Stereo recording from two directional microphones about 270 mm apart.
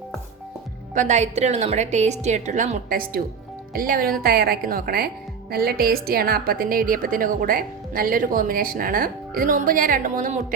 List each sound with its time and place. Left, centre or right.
0.9 s a woman's voice: right